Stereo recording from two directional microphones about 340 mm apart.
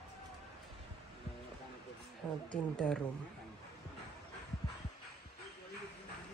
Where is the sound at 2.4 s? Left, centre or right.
Centre.